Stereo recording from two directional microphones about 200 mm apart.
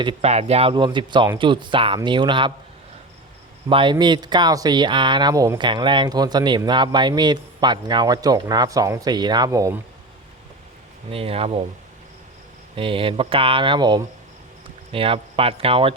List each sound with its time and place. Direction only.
0.0 s speech: 25° right (ahead or behind)
3.7 s speech: 25° right (ahead or behind)
11.1 s speech: 30° right (ahead or behind)
12.7 s speech: 25° right (ahead or behind)